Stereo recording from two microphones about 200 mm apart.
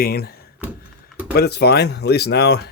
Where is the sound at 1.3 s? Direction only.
55° left (ahead or behind).